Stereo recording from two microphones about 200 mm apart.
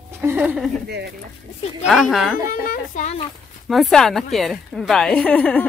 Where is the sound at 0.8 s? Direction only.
55° right (ahead or behind).